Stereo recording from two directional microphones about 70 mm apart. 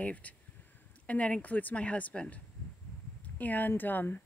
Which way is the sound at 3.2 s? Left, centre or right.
Left.